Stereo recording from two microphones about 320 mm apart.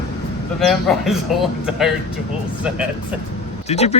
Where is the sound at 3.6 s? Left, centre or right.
Centre.